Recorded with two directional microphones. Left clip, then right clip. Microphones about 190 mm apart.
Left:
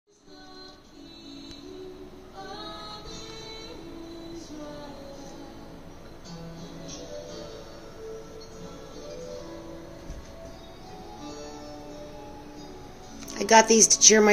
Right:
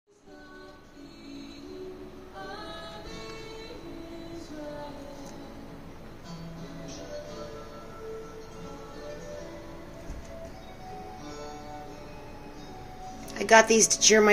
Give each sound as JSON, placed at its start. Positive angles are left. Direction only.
{"t": 13.3, "sound": "speech", "side_deg": 15}